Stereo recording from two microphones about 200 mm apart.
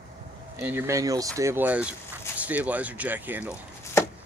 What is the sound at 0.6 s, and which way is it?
Speech, 10° right (ahead or behind).